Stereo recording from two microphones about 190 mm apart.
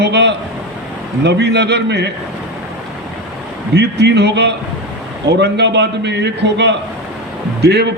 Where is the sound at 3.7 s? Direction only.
60° right (ahead or behind).